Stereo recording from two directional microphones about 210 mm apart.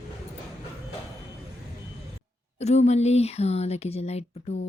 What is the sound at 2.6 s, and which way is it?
Speech, 30° left (ahead or behind).